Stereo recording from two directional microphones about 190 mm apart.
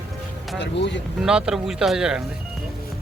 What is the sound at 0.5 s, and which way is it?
Speech, 70° left (ahead or behind).